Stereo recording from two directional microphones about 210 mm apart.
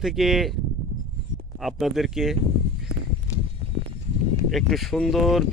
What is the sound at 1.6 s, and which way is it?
Speech, centre (ahead or behind).